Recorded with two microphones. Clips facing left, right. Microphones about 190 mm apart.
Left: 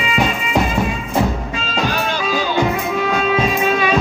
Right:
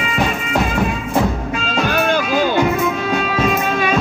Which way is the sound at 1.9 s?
50° right (ahead or behind).